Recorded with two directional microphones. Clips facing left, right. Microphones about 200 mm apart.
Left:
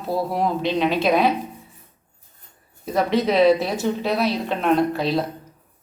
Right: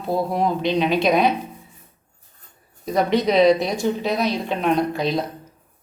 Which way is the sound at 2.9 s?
Centre (ahead or behind).